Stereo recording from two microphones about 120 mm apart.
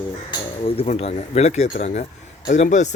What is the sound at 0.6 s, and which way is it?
Speech, 55° left (ahead or behind).